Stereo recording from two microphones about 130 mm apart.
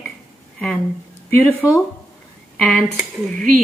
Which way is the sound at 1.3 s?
15° left (ahead or behind).